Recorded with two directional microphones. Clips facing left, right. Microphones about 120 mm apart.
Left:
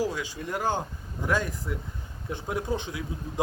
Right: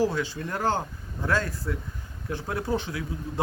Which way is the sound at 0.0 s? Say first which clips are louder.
Right 4 dB; 15° left (ahead or behind).